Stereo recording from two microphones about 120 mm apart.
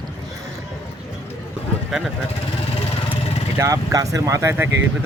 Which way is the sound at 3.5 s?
30° right (ahead or behind).